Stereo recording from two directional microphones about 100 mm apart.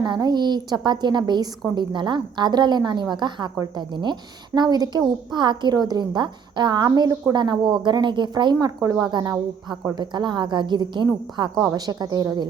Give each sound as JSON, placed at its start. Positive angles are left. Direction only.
{"t": 0.0, "sound": "a woman's voice", "side_deg": -45}
{"t": 8.5, "sound": "a woman's voice", "side_deg": -35}